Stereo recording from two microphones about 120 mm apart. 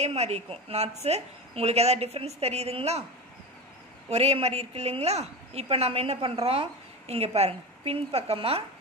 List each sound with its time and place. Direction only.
0.0 s a woman's voice: 60° right (ahead or behind)
4.1 s a woman's voice: 60° right (ahead or behind)